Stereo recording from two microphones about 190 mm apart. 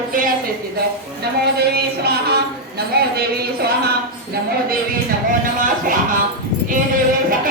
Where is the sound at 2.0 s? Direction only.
55° right (ahead or behind).